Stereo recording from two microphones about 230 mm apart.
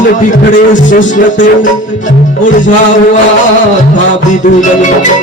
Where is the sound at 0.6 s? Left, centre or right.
Left.